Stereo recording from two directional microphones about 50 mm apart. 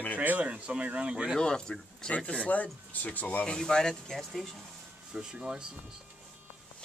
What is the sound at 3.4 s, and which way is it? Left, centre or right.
Speech, centre.